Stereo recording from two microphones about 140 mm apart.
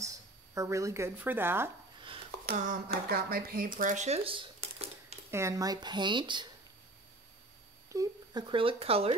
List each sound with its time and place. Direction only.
0.6 s speech: 20° right (ahead or behind)
2.0 s a sound: 40° right (ahead or behind)
2.4 s speech: 65° right (ahead or behind); by 4.6 s 40° right (ahead or behind)
5.3 s speech: 20° right (ahead or behind)
7.9 s speech: 30° right (ahead or behind); by 9.1 s 45° right (ahead or behind)